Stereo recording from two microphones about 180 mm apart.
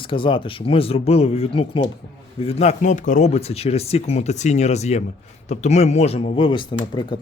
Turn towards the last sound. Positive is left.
turn(degrees=25)  # may be behind; listen again after turning